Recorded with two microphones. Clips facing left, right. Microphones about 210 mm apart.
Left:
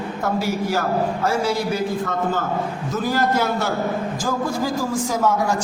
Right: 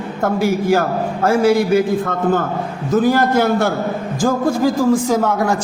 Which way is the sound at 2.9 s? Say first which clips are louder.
Right 8 dB; 50° right (ahead or behind).